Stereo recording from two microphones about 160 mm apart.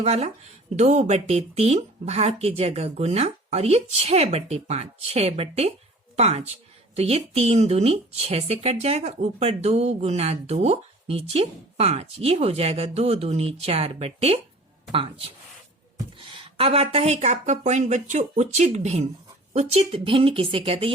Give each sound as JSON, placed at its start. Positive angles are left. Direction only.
{"t": 0.0, "sound": "a woman's voice", "side_deg": -45}